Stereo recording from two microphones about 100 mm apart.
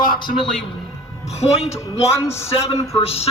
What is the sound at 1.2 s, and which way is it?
Speech, 90° left.